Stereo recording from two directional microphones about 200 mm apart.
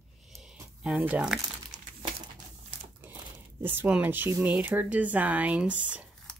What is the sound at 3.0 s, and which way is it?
Speech, 10° right (ahead or behind).